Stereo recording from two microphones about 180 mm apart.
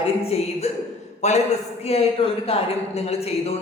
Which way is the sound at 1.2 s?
40° left (ahead or behind).